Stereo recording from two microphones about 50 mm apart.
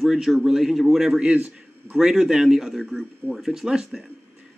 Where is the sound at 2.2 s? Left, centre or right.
Centre.